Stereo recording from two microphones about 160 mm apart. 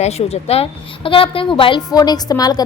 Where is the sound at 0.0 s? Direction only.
40° left (ahead or behind).